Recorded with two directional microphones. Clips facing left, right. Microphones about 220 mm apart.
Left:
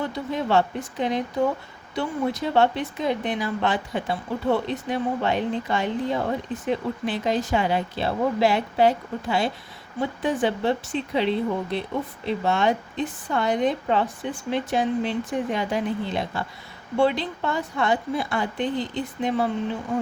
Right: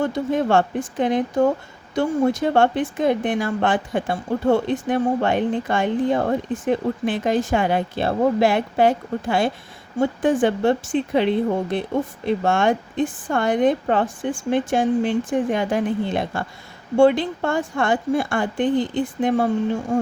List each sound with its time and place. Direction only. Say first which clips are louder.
0.0 s speech: right 6 dB; 50° right (ahead or behind)